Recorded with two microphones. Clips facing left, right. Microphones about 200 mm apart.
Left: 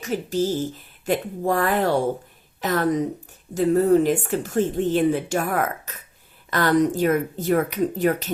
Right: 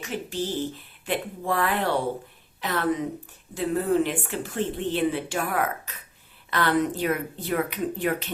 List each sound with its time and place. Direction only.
0.0 s speech: 40° left (ahead or behind)